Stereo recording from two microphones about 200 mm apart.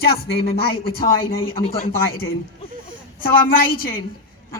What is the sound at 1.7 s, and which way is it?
Speech, 45° left (ahead or behind).